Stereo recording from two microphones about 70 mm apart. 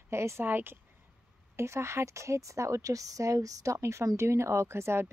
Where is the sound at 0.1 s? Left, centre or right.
Right.